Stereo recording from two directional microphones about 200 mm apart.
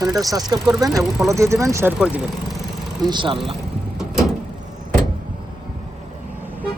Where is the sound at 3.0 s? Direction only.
25° right (ahead or behind).